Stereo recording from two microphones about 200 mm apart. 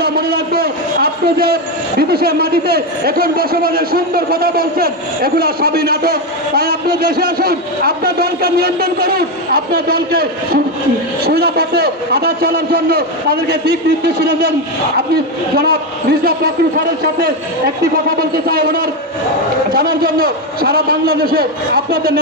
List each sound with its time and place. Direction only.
0.0 s a man's voice: 50° right (ahead or behind)
15.5 s a man's voice: 50° right (ahead or behind)